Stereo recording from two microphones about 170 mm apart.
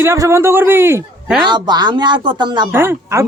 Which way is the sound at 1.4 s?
25° right (ahead or behind).